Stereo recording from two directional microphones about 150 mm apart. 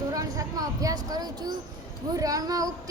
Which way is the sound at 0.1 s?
25° right (ahead or behind).